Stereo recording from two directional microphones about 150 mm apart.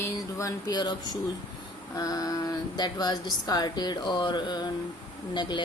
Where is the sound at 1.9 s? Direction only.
25° left (ahead or behind).